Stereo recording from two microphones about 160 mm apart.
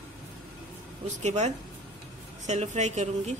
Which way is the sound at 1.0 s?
45° right (ahead or behind).